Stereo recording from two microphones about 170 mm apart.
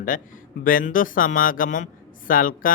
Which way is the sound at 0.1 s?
50° left (ahead or behind).